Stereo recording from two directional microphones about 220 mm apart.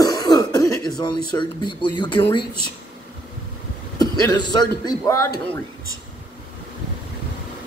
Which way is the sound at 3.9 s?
20° left (ahead or behind).